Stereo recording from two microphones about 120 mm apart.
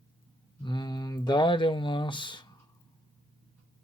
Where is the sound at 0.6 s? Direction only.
40° left (ahead or behind).